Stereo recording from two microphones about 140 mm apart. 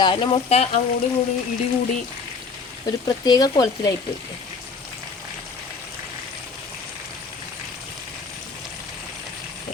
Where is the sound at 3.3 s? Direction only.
30° left (ahead or behind).